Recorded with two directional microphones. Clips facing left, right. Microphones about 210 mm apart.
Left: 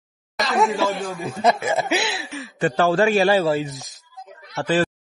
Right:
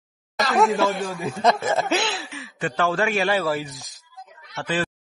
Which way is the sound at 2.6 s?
35° left (ahead or behind).